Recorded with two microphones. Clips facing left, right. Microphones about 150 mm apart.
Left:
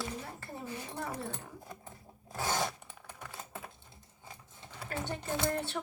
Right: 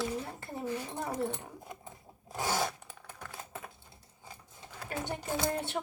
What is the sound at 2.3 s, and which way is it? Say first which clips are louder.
Zipper: right 1 dB; 10° right (ahead or behind).